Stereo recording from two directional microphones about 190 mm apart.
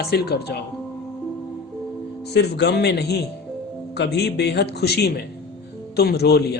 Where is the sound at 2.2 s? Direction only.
60° left (ahead or behind).